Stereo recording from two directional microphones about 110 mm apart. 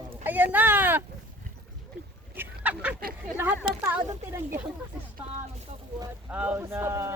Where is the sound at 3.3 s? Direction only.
20° right (ahead or behind).